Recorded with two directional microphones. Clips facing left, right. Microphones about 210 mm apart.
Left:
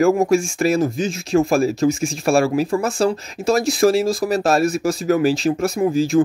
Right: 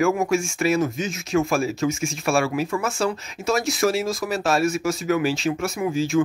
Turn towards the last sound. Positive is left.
turn(degrees=35)  # may be behind; listen again after turning